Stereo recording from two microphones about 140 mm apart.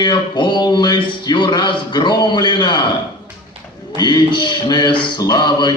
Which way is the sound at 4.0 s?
30° left (ahead or behind).